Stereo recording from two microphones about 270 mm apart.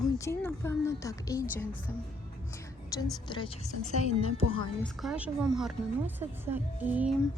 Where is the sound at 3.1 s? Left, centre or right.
Centre.